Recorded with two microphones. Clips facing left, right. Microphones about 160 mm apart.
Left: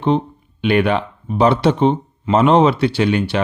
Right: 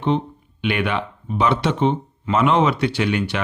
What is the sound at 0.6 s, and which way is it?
Speech, 35° left (ahead or behind).